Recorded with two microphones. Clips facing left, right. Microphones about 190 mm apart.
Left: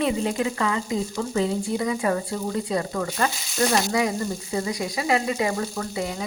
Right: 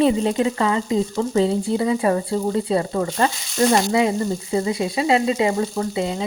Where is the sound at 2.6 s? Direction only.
30° right (ahead or behind).